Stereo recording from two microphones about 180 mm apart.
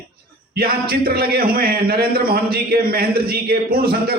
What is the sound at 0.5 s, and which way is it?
A man's voice, 60° right (ahead or behind).